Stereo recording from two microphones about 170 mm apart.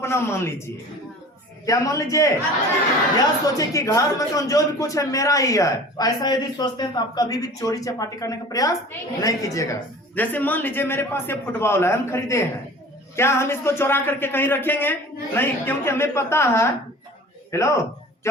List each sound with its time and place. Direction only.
0.0 s a man's voice: 15° left (ahead or behind)